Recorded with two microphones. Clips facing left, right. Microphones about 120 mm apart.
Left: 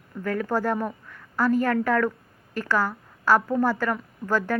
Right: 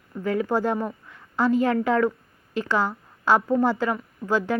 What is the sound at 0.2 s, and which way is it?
A woman's voice, 15° right (ahead or behind).